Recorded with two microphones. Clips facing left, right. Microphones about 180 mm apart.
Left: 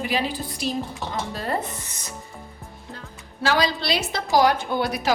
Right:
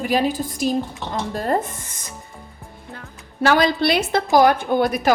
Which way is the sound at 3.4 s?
55° right (ahead or behind).